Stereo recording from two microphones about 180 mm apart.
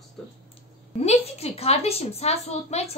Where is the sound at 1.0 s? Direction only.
35° left (ahead or behind).